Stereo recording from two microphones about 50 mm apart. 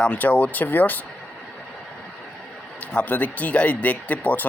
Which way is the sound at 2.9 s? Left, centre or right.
Left.